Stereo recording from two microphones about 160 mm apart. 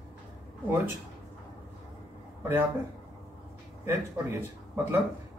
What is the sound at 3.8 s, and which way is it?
A man's voice, 15° right (ahead or behind).